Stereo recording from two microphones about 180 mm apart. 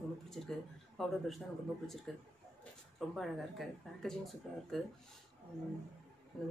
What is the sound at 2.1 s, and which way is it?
Speech, 5° left (ahead or behind).